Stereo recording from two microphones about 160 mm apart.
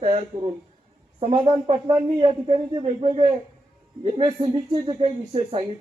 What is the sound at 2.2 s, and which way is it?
Speech, 35° right (ahead or behind).